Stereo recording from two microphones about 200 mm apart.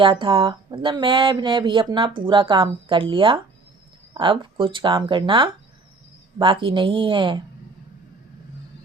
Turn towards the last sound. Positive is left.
turn(degrees=-25)  # may be behind; listen again after turning